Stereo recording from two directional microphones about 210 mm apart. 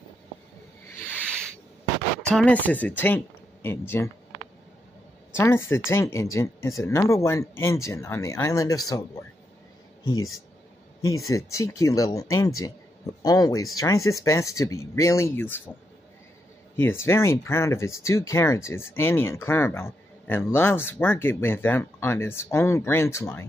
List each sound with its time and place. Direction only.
2.2 s speech: 5° left (ahead or behind)
5.3 s speech: 10° left (ahead or behind)
10.1 s speech: 75° left (ahead or behind)
11.1 s speech: 15° left (ahead or behind)
17.0 s speech: 10° left (ahead or behind)